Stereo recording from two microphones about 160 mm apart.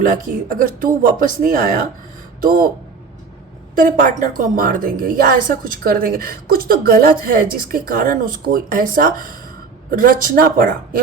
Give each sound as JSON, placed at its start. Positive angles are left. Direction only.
{"t": 0.0, "sound": "a woman's voice", "side_deg": -55}
{"t": 3.8, "sound": "a woman's voice", "side_deg": -55}